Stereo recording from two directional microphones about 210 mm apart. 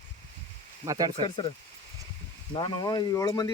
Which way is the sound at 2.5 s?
20° left (ahead or behind).